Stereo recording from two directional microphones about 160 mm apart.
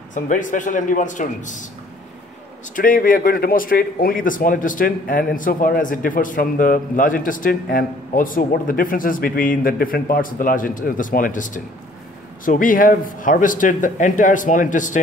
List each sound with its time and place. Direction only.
0.1 s a man's voice: 55° left (ahead or behind)
2.7 s a man's voice: 60° left (ahead or behind)